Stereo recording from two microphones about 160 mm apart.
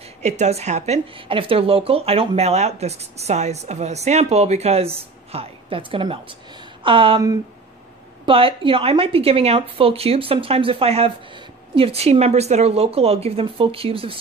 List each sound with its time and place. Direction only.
0.2 s speech: 45° right (ahead or behind)
8.3 s speech: 35° right (ahead or behind)